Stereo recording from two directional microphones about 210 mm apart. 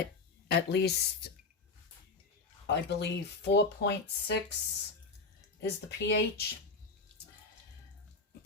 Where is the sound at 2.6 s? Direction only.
55° left (ahead or behind).